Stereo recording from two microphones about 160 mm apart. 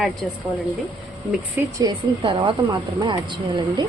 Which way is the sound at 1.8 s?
30° right (ahead or behind).